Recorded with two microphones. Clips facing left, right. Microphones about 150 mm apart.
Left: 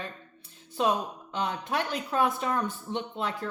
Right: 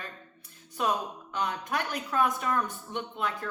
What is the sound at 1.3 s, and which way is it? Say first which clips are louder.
Speech: left 1 dB; 25° left (ahead or behind).